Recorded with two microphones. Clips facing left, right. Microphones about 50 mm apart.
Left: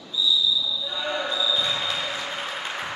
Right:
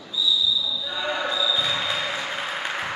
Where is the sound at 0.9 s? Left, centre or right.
Centre.